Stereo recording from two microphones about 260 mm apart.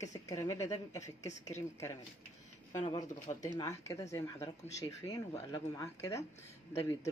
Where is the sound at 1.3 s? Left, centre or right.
Left.